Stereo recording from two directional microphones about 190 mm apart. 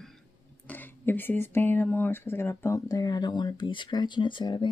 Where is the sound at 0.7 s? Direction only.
10° left (ahead or behind).